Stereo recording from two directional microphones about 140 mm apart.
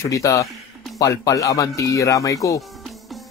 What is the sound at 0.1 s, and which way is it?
Speech, 25° left (ahead or behind).